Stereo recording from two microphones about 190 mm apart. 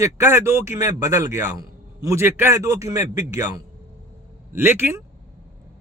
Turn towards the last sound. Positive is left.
turn(degrees=-10)  # may be behind; listen again after turning